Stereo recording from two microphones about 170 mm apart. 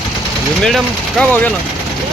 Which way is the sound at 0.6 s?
Centre (ahead or behind).